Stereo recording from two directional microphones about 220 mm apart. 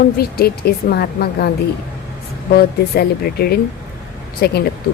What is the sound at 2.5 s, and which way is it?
A woman's voice, 45° left (ahead or behind).